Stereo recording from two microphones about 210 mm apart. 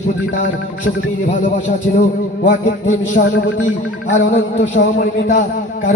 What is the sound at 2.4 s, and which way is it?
Speech, 35° left (ahead or behind).